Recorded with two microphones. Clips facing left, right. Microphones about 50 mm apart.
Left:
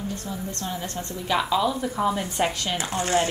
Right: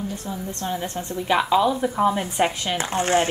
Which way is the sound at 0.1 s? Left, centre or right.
Centre.